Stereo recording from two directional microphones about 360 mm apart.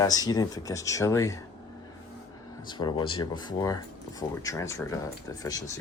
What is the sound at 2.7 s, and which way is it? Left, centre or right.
Speech, centre.